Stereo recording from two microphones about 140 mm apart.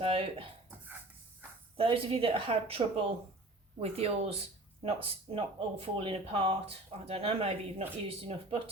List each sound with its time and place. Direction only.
0.0 s speech: 40° right (ahead or behind)
1.7 s speech: 40° right (ahead or behind)